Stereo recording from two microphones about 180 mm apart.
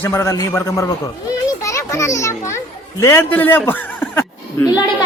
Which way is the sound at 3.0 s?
15° left (ahead or behind).